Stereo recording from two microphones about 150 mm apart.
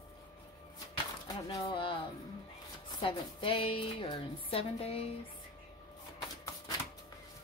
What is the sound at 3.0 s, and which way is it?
A woman's voice, 35° left (ahead or behind).